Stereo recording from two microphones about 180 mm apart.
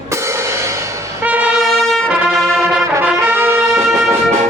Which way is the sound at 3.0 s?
10° right (ahead or behind).